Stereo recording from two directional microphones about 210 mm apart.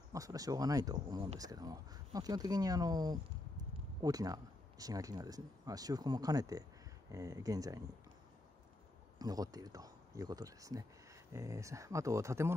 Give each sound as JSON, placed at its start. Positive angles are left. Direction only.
{"t": 0.1, "sound": "speech", "side_deg": -15}
{"t": 9.2, "sound": "speech", "side_deg": -15}